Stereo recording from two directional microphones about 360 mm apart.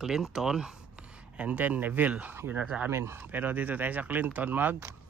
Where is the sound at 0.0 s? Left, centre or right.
Centre.